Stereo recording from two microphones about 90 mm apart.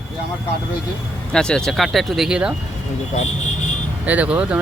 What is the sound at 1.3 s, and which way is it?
Speech, 10° left (ahead or behind).